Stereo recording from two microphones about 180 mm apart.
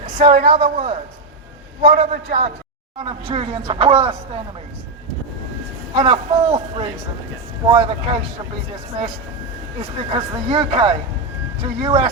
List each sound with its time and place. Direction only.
0.2 s a man's voice: 50° right (ahead or behind)
0.5 s a man's voice: 30° right (ahead or behind)
6.0 s a man's voice: 30° right (ahead or behind)
10.0 s speech: 25° right (ahead or behind)